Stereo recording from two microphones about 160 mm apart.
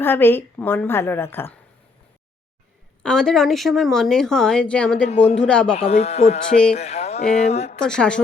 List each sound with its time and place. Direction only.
0.0 s a woman's voice: 15° left (ahead or behind)
3.0 s a woman's voice: 5° left (ahead or behind)
5.7 s speech: 45° left (ahead or behind)
6.7 s a sound: 40° left (ahead or behind)
7.5 s speech: 40° left (ahead or behind)
7.8 s a woman's voice: 5° left (ahead or behind)